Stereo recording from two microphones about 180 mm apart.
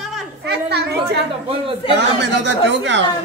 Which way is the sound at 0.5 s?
65° right (ahead or behind).